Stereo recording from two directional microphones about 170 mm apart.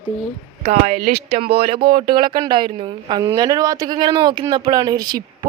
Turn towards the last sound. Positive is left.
turn(degrees=-25)  # may be behind; listen again after turning